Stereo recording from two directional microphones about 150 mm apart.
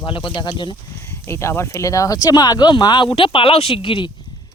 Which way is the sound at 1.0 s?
15° left (ahead or behind).